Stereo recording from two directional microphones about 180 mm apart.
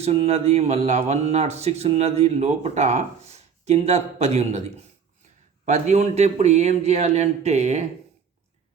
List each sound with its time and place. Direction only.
0.0 s speech: 35° right (ahead or behind)
5.6 s speech: 40° right (ahead or behind)